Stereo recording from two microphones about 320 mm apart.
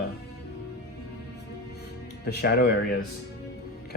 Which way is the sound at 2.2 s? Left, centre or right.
Left.